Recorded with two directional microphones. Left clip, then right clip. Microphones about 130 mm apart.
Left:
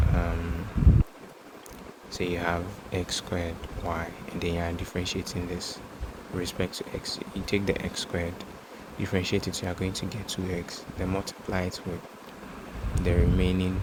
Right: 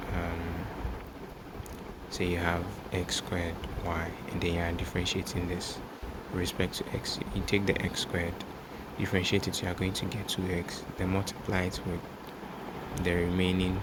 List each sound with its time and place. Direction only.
2.1 s speech: 20° left (ahead or behind)
13.0 s speech: 10° left (ahead or behind)